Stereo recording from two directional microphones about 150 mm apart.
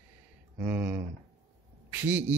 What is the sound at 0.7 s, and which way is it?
A man's voice, 10° right (ahead or behind).